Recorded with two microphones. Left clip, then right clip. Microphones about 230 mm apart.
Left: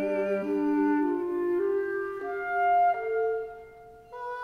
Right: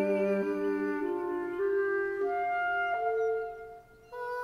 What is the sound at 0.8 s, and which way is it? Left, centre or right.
Music, centre.